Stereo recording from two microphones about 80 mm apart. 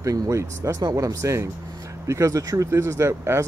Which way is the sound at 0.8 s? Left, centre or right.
Right.